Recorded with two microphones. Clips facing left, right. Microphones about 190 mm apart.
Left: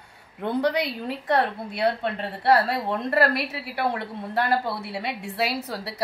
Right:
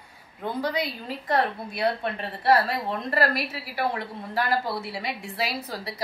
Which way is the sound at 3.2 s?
65° left (ahead or behind).